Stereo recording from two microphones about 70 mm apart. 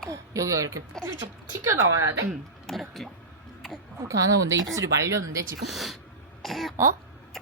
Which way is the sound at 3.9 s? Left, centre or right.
Right.